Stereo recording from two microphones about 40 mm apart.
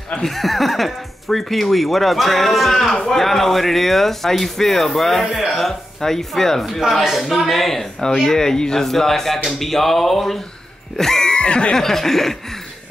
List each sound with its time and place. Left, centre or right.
0.2 s speech: centre
6.8 s speech: centre
7.2 s speech: centre
11.0 s music: centre
11.7 s speech: centre